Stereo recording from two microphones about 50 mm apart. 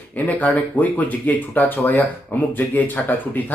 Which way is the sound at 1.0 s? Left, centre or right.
Left.